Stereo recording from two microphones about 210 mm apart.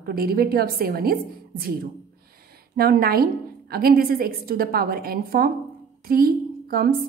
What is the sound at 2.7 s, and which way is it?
A woman's voice, 45° right (ahead or behind).